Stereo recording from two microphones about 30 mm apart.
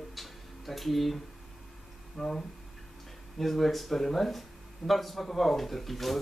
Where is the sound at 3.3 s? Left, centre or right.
Centre.